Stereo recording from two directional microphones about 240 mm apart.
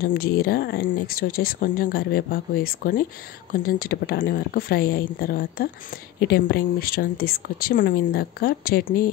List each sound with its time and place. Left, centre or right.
0.0 s a woman's voice: left